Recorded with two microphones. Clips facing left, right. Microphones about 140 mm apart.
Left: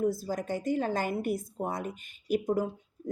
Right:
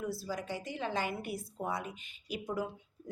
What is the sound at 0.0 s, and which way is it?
A woman's voice, 45° left (ahead or behind).